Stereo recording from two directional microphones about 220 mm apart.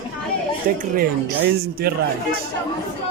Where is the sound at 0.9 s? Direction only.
45° right (ahead or behind).